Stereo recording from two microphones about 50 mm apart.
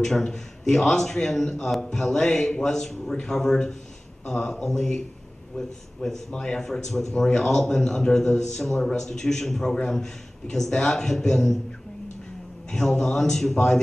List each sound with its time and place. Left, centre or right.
0.0 s a man's voice: centre
6.6 s a man's voice: centre
10.8 s a man's voice: centre
12.7 s a man's voice: centre